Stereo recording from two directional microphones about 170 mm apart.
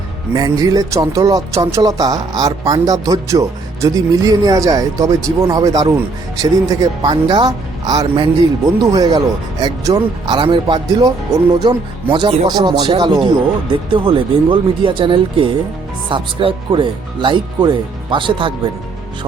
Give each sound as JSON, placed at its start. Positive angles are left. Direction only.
{"t": 0.3, "sound": "speech", "side_deg": -20}